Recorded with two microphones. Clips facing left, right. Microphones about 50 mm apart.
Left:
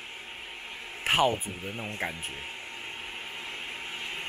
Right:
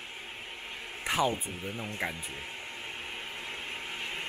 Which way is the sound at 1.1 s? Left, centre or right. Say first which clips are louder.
Left 4 dB; left.